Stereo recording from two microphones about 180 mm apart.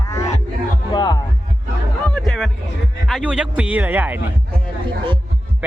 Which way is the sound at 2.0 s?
5° left (ahead or behind).